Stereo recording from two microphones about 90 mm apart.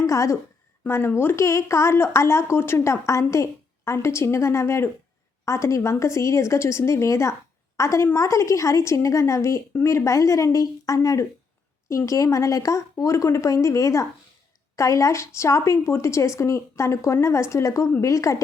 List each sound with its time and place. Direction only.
0.1 s a woman's voice: 35° left (ahead or behind)